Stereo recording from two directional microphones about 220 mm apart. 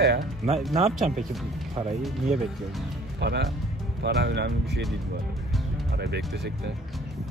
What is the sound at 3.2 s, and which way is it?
Speech, 50° right (ahead or behind).